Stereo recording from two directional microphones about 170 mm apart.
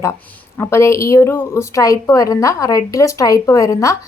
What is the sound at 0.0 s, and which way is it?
Speech, 15° left (ahead or behind).